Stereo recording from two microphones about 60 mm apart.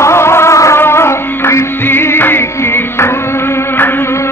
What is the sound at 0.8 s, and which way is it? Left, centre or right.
Music, left.